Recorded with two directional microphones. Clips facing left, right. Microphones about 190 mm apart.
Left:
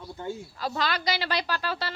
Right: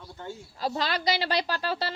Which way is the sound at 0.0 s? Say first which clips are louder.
Left 5 dB; 10° left (ahead or behind).